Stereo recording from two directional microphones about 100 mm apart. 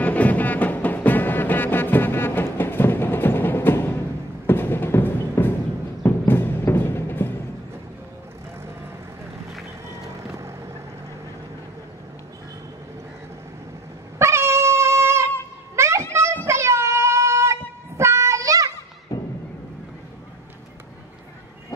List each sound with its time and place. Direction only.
0.0 s music: 15° left (ahead or behind)
10.0 s boat: 30° right (ahead or behind)
14.1 s dog: 25° right (ahead or behind)
15.7 s a sound: 30° right (ahead or behind)
19.1 s music: 30° left (ahead or behind)